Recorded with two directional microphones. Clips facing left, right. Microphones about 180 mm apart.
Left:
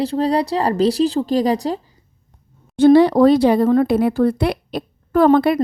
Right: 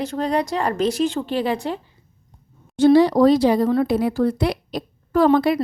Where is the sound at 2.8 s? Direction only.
55° left (ahead or behind).